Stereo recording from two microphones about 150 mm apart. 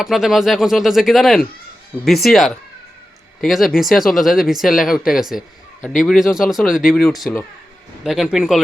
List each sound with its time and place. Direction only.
0.0 s speech: centre (ahead or behind)